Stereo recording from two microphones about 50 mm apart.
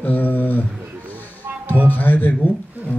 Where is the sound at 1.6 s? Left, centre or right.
Left.